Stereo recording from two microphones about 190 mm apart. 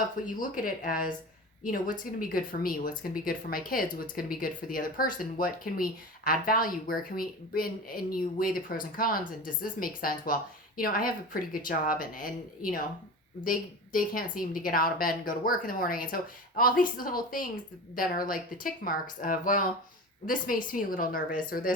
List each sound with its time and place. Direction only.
0.3 s speech: 45° left (ahead or behind)